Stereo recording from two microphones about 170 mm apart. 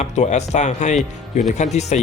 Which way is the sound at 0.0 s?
40° left (ahead or behind).